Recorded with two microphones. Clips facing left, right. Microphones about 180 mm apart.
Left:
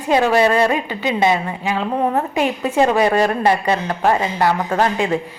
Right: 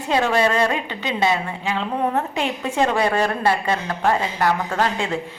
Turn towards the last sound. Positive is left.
turn(degrees=20)  # may be behind; listen again after turning